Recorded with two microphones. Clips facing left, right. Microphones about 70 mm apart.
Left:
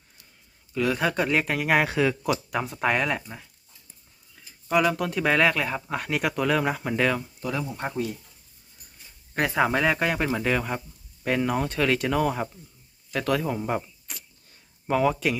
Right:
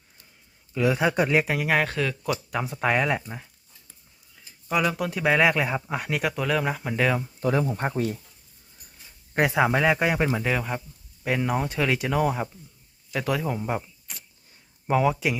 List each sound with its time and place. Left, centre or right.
0.7 s speech: centre
4.7 s speech: centre
6.1 s speech: centre
7.4 s speech: right
9.5 s speech: centre